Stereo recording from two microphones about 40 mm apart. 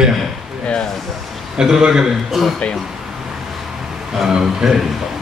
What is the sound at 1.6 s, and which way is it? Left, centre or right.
Speech, centre.